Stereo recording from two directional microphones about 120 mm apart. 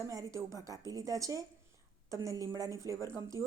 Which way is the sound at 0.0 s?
30° right (ahead or behind).